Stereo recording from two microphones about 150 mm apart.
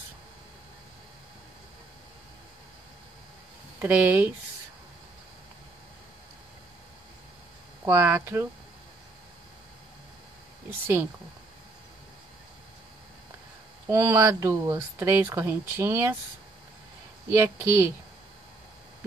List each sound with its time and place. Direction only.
3.8 s speech: 15° right (ahead or behind)
7.8 s speech: 15° right (ahead or behind)
13.8 s speech: 15° right (ahead or behind)
17.3 s speech: 15° right (ahead or behind)